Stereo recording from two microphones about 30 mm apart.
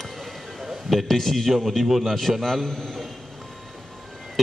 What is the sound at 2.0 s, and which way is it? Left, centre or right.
Speech, centre.